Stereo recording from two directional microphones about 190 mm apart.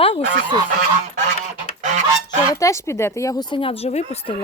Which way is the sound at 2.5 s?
15° left (ahead or behind).